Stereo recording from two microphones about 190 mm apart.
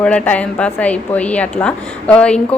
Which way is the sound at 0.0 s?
5° left (ahead or behind).